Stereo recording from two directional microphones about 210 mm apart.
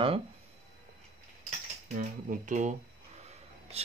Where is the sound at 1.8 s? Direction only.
40° right (ahead or behind).